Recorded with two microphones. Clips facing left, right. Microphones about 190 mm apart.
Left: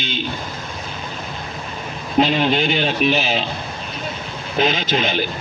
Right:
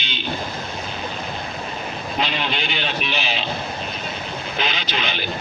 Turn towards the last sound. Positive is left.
turn(degrees=45)  # may be behind; listen again after turning